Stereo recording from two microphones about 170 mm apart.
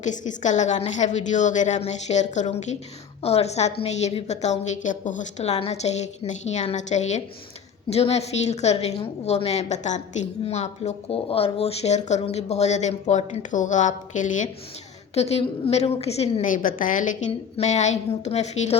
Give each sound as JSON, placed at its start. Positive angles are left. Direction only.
{"t": 0.0, "sound": "a woman's voice", "side_deg": 45}